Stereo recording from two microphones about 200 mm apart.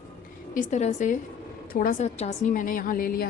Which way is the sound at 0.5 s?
35° left (ahead or behind).